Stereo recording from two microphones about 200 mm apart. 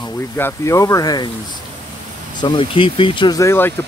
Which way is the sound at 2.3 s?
20° left (ahead or behind).